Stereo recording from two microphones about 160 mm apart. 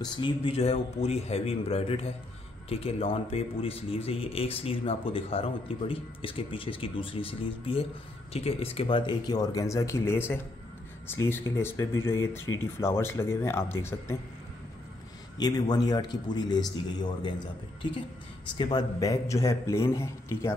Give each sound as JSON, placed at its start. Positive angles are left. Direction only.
{"t": 0.0, "sound": "speech", "side_deg": 35}
{"t": 15.3, "sound": "speech", "side_deg": 25}
{"t": 18.5, "sound": "speech", "side_deg": 25}